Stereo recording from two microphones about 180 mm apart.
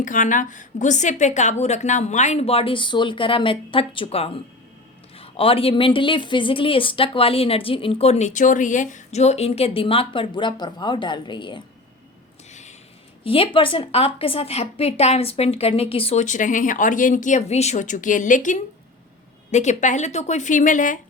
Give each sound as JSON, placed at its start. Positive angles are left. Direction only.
{"t": 0.0, "sound": "speech", "side_deg": 45}
{"t": 12.5, "sound": "a sound", "side_deg": 40}
{"t": 13.2, "sound": "speech", "side_deg": 30}